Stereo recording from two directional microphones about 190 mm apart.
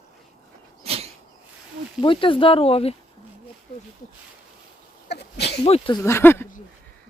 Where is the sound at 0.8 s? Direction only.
30° right (ahead or behind).